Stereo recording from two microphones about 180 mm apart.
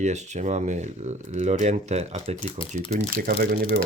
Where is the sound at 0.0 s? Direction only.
40° right (ahead or behind).